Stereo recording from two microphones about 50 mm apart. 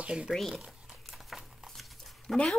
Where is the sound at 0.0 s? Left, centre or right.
Right.